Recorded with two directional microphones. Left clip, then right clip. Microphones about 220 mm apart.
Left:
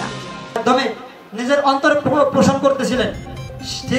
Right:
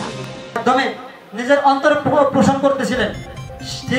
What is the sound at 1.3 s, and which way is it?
A woman's voice, 45° left (ahead or behind).